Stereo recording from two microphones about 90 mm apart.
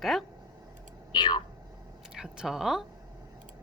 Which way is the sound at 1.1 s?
60° left (ahead or behind).